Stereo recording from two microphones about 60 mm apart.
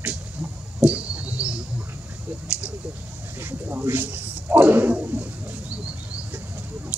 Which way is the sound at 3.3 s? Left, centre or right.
Right.